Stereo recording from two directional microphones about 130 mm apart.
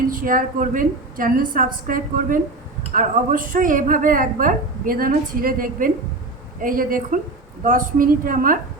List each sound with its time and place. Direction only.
0.1 s a woman's voice: 90° right